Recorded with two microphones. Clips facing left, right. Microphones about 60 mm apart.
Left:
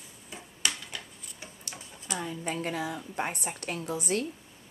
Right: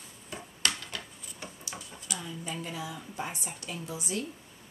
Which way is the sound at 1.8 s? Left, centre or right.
Left.